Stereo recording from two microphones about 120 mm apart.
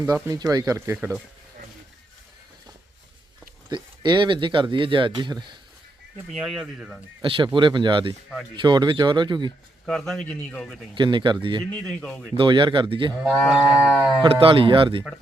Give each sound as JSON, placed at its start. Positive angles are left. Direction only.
{"t": 0.0, "sound": "speech", "side_deg": -30}
{"t": 3.7, "sound": "speech", "side_deg": -40}
{"t": 6.3, "sound": "speech", "side_deg": 0}
{"t": 7.2, "sound": "speech", "side_deg": -45}
{"t": 9.8, "sound": "speech", "side_deg": 5}
{"t": 10.9, "sound": "speech", "side_deg": -40}
{"t": 11.7, "sound": "speech", "side_deg": 5}
{"t": 12.4, "sound": "speech", "side_deg": -40}
{"t": 13.2, "sound": "speech", "side_deg": 0}
{"t": 14.2, "sound": "speech", "side_deg": -50}